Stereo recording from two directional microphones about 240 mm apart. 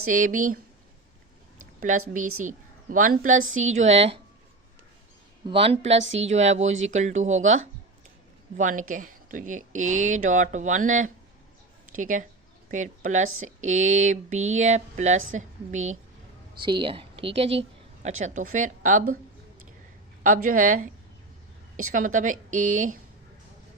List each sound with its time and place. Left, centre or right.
0.1 s a woman's voice: right
1.9 s a woman's voice: right
3.3 s speech: right
3.6 s speech: right
5.5 s a woman's voice: right
16.6 s a woman's voice: centre
20.2 s a woman's voice: right
21.9 s a woman's voice: right